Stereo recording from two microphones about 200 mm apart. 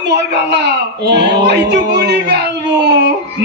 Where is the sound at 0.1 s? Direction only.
60° right (ahead or behind).